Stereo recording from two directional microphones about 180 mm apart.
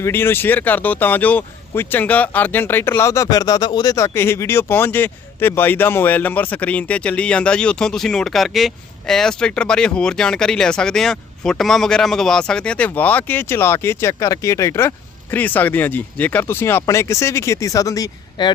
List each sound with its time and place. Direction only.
0.0 s speech: 10° left (ahead or behind)